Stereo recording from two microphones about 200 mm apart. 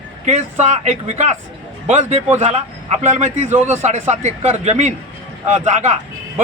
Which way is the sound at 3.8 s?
35° right (ahead or behind).